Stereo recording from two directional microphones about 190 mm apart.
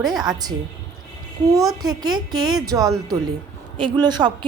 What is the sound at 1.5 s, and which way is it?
A woman's voice, 20° right (ahead or behind).